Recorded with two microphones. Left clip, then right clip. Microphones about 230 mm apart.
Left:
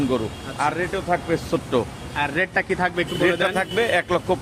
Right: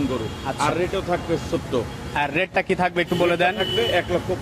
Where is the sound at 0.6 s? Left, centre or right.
Left.